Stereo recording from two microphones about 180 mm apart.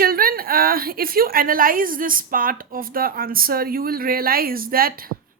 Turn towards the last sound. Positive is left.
turn(degrees=-55)  # may be behind; listen again after turning